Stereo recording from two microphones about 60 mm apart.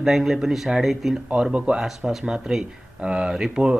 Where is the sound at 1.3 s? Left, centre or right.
Centre.